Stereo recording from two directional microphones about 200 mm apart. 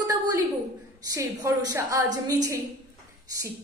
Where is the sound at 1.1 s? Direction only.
15° right (ahead or behind).